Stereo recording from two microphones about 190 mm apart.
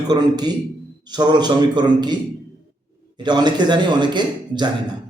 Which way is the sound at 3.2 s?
20° right (ahead or behind).